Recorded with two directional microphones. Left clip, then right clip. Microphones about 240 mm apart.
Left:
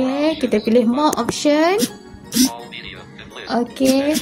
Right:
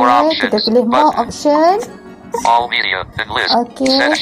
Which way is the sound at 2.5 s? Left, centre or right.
Right.